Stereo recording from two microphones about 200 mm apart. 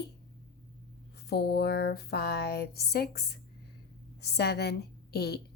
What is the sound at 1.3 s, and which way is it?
A woman's voice, 55° left (ahead or behind).